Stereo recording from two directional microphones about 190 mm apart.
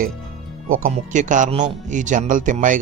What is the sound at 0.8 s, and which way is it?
Speech, 40° right (ahead or behind).